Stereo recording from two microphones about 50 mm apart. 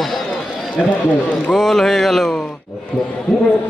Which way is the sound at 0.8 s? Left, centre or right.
Centre.